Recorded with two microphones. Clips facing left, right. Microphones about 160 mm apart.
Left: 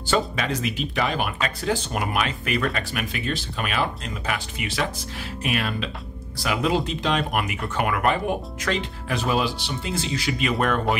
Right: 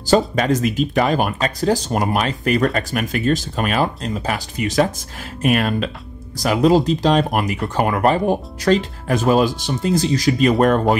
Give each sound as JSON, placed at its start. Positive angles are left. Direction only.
{"t": 0.0, "sound": "speech", "side_deg": -40}